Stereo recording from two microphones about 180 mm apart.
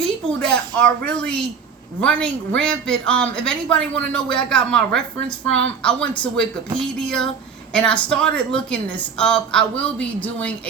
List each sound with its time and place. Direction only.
0.0 s a woman's voice: 5° left (ahead or behind)